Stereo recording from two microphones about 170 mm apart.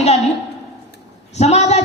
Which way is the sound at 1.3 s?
40° left (ahead or behind).